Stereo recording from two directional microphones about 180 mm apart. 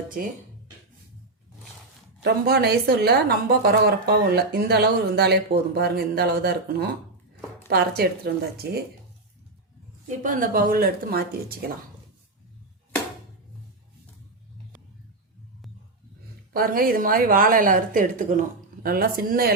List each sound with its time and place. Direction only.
0.2 s a woman's voice: 55° right (ahead or behind)
2.2 s a woman's voice: 60° right (ahead or behind)
10.1 s a woman's voice: 50° right (ahead or behind)
16.5 s a woman's voice: 55° right (ahead or behind)